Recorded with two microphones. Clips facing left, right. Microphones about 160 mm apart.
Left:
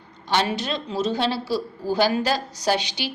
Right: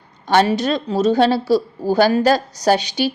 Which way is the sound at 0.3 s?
45° right (ahead or behind).